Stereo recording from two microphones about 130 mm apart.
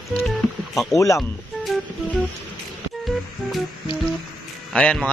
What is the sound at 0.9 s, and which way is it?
Speech, 25° left (ahead or behind).